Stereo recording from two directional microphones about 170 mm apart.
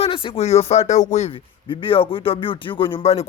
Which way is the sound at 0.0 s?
30° left (ahead or behind).